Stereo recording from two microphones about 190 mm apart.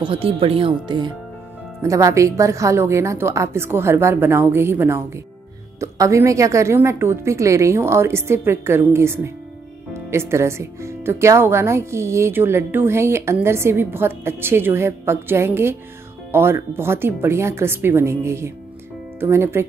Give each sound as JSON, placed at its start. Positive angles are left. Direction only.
{"t": 0.0, "sound": "speech", "side_deg": -30}